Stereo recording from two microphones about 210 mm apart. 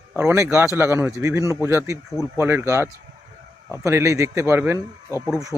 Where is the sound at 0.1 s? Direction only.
10° right (ahead or behind).